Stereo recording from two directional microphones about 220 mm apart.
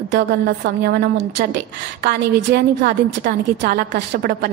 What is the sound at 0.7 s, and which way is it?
A woman's voice, 45° right (ahead or behind).